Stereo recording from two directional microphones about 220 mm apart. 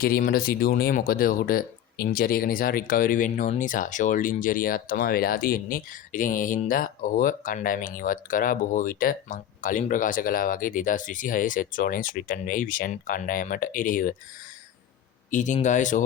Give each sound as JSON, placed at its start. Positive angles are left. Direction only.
{"t": 0.0, "sound": "speech", "side_deg": 40}
{"t": 15.3, "sound": "speech", "side_deg": 35}